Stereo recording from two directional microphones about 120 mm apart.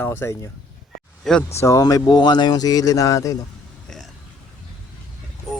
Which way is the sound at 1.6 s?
30° left (ahead or behind).